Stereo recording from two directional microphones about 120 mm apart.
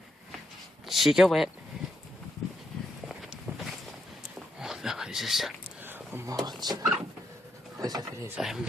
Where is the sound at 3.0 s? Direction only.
Centre (ahead or behind).